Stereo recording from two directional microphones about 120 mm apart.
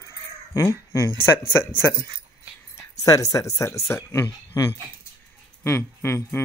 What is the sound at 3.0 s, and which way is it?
Speech, 30° left (ahead or behind).